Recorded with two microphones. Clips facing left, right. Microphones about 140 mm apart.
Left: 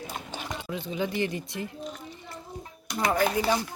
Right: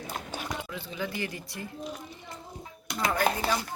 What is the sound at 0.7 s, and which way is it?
Speech, 20° left (ahead or behind).